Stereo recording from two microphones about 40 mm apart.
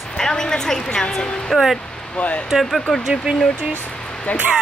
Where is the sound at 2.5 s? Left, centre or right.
Centre.